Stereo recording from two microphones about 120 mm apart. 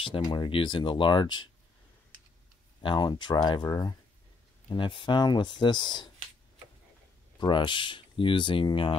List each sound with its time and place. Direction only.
0.0 s speech: 45° left (ahead or behind)
2.8 s speech: 40° left (ahead or behind)
7.3 s speech: 40° left (ahead or behind)